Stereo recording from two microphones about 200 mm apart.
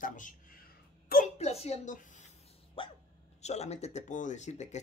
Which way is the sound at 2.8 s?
25° left (ahead or behind).